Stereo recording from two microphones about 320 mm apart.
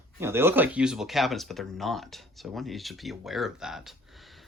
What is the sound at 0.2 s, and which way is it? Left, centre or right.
Speech, centre.